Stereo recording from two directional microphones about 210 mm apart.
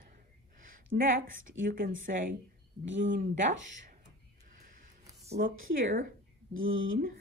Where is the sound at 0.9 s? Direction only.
45° right (ahead or behind).